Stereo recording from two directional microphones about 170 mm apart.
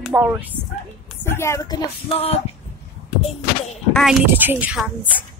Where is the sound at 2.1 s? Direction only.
35° left (ahead or behind).